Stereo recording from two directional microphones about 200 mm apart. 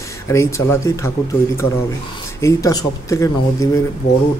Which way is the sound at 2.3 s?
15° left (ahead or behind).